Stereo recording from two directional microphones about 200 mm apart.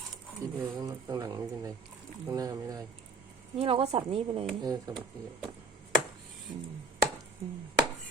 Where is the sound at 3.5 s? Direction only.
30° right (ahead or behind).